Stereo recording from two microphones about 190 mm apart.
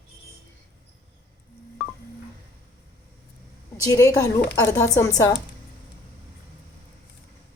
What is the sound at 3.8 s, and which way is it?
Speech, 15° left (ahead or behind).